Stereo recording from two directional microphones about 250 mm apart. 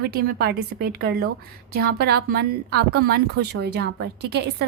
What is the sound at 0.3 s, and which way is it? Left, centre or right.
A woman's voice, right.